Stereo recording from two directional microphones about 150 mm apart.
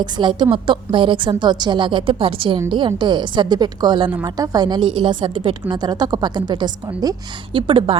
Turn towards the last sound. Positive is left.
turn(degrees=-35)  # may be behind; listen again after turning